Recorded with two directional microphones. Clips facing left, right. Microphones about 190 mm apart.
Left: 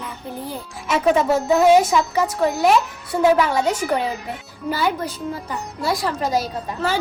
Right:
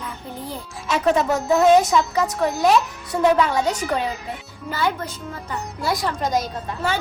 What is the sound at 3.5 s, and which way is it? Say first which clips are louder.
Speech: left 1 dB; 30° left (ahead or behind).